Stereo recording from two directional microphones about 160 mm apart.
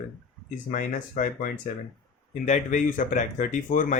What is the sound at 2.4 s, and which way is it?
Speech, 50° left (ahead or behind).